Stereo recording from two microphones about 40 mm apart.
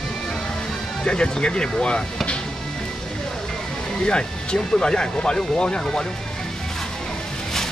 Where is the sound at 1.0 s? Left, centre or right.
Left.